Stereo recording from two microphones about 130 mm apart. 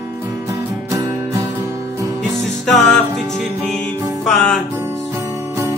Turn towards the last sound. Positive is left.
turn(degrees=5)  # may be behind; listen again after turning